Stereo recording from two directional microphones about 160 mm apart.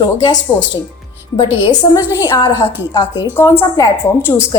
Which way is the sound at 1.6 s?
20° left (ahead or behind).